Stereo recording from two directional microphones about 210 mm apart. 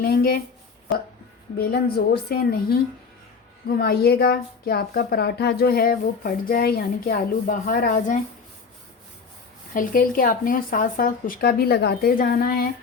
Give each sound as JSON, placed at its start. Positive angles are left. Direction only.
{"t": 0.0, "sound": "a woman's voice", "side_deg": 45}
{"t": 1.5, "sound": "a woman's voice", "side_deg": 50}
{"t": 9.7, "sound": "a woman's voice", "side_deg": 40}